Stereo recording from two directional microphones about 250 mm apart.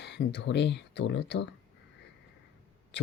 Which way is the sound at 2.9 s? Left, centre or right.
Left.